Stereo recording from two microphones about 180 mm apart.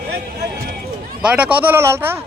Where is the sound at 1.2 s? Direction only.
5° right (ahead or behind).